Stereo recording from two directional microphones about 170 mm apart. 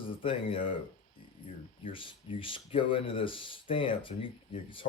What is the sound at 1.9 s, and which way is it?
Speech, 30° left (ahead or behind).